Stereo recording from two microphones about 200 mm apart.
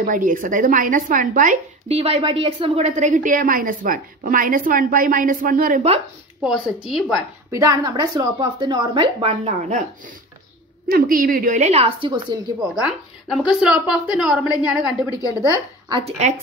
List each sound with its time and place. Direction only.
0.0 s speech: 40° right (ahead or behind)
6.4 s a woman's voice: 5° right (ahead or behind)
7.5 s a woman's voice: 20° right (ahead or behind)
13.3 s a woman's voice: 5° right (ahead or behind)
15.2 s a woman's voice: 15° left (ahead or behind)
15.9 s a woman's voice: 30° right (ahead or behind)